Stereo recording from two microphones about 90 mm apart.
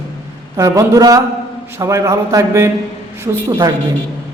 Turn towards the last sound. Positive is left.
turn(degrees=-40)  # may be behind; listen again after turning